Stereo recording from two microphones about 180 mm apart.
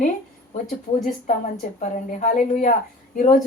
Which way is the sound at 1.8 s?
45° left (ahead or behind).